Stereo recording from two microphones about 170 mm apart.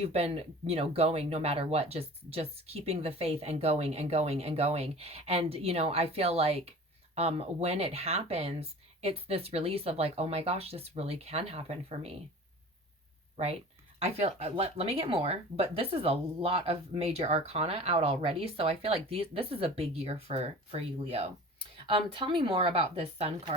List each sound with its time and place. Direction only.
0.0 s speech: 35° right (ahead or behind)
13.3 s speech: 35° right (ahead or behind)